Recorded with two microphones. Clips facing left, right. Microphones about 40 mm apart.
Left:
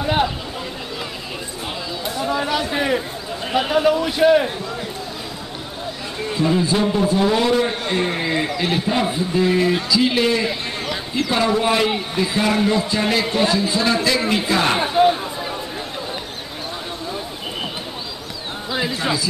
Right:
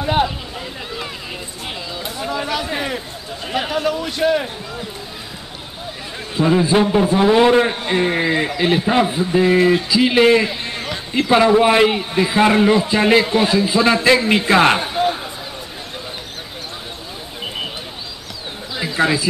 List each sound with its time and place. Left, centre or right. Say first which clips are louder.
0.0 s speech: right 1 dB; centre
2.0 s a man's voice: left 2 dB; centre
6.4 s a man's voice: right 4 dB; right
13.2 s speech: right 2 dB; centre
14.1 s a man's voice: right 5 dB; right
14.8 s a sound: left 4 dB; centre
18.7 s a sound: left 3 dB; centre